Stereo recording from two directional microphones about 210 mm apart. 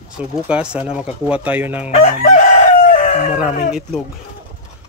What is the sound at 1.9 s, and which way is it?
Chicken, 40° left (ahead or behind).